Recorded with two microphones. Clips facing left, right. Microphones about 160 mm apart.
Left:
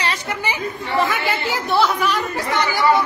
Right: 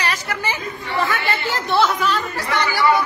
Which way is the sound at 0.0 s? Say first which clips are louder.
Even; 25° left (ahead or behind).